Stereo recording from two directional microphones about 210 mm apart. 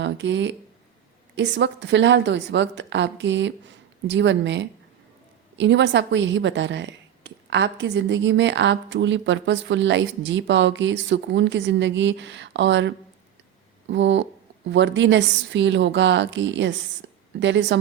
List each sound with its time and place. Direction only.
0.0 s a woman's voice: 60° right (ahead or behind)
17.0 s a sound: 60° right (ahead or behind)
17.4 s a woman's voice: 60° right (ahead or behind)